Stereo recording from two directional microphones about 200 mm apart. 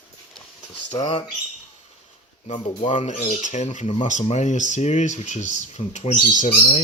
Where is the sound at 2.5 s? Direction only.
35° left (ahead or behind).